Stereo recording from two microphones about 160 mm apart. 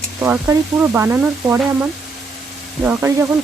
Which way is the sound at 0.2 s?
15° right (ahead or behind).